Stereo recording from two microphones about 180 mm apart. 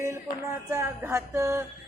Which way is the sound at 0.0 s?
15° right (ahead or behind).